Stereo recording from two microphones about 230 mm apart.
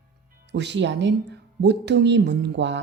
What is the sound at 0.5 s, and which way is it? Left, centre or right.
A woman's voice, right.